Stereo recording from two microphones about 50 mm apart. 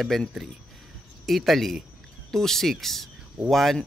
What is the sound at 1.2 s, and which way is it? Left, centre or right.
Speech, centre.